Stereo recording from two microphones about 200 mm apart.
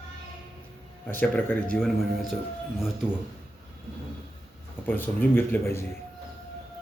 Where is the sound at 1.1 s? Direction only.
10° left (ahead or behind).